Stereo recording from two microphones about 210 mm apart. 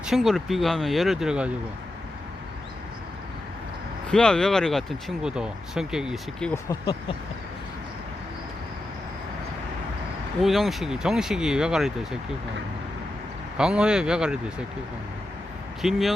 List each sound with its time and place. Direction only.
0.0 s speech: centre (ahead or behind)
4.1 s speech: 5° left (ahead or behind)
6.5 s speech: 15° left (ahead or behind)
10.4 s speech: centre (ahead or behind)
13.6 s speech: 5° right (ahead or behind)
15.8 s speech: centre (ahead or behind)